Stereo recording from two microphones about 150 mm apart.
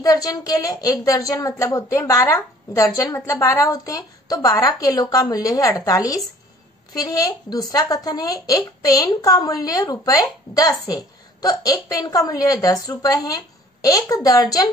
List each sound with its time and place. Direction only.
0.0 s speech: 25° left (ahead or behind)